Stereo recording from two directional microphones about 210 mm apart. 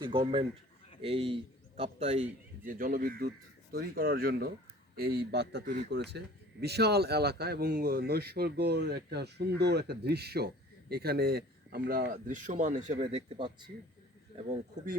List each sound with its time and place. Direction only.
0.0 s a man's voice: 25° right (ahead or behind)
2.6 s a man's voice: 40° right (ahead or behind)